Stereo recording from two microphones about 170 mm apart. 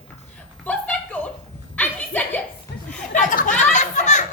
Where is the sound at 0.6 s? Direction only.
10° left (ahead or behind).